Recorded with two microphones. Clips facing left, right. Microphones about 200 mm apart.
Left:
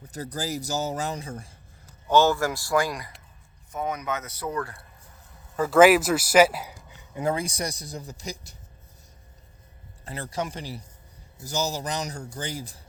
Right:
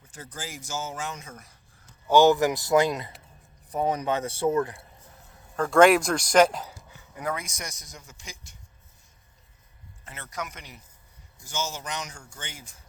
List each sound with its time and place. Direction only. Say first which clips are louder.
0.0 s speech: left 8 dB; 40° left (ahead or behind)
2.0 s speech: right 2 dB; 15° right (ahead or behind)
3.7 s speech: right 4 dB; 30° right (ahead or behind)
5.5 s speech: left 1 dB; 5° left (ahead or behind)
7.1 s speech: left 5 dB; 25° left (ahead or behind)
10.0 s speech: left 6 dB; 35° left (ahead or behind)